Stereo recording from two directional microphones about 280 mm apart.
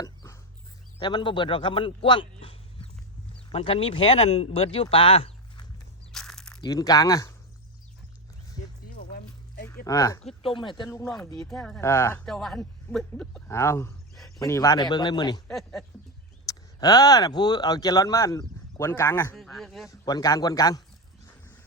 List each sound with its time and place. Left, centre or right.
0.0 s a sound: centre
1.0 s speech: centre
6.1 s mechanisms: centre
6.6 s speech: centre
9.6 s speech: centre
15.4 s speech: centre
16.5 s speech: centre
19.9 s speech: centre